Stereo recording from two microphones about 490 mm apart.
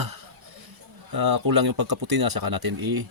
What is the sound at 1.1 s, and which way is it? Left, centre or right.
Speech, right.